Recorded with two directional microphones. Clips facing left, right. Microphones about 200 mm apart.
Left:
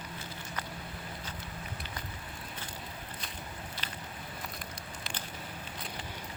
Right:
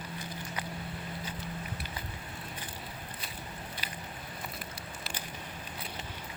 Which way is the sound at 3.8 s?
10° right (ahead or behind).